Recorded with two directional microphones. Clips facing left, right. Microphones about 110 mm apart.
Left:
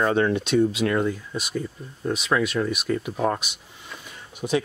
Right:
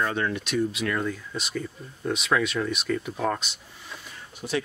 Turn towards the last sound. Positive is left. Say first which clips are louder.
# left 6 dB
turn(degrees=20)  # may be behind; listen again after turning